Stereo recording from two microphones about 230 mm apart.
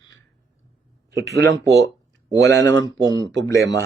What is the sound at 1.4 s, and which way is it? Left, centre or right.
Speech, right.